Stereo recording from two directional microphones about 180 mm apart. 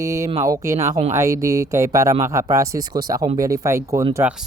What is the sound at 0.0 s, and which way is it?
Speech, 15° right (ahead or behind).